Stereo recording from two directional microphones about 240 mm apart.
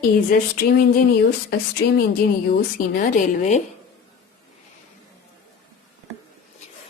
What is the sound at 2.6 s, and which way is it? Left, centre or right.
Speech, left.